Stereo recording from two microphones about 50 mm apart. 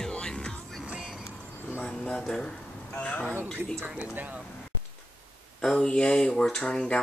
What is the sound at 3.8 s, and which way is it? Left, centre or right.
Speech, right.